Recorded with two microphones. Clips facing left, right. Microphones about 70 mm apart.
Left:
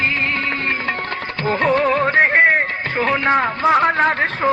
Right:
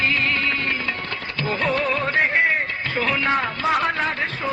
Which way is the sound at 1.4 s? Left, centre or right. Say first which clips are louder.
Left 6 dB; left.